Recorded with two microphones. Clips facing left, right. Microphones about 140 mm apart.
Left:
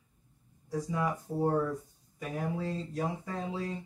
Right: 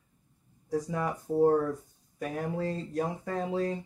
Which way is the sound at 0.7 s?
50° right (ahead or behind).